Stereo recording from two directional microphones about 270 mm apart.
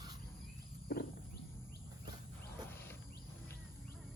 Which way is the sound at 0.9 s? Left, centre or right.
Left.